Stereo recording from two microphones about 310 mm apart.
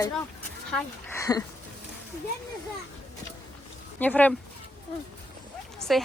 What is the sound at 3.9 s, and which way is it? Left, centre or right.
Speech, centre.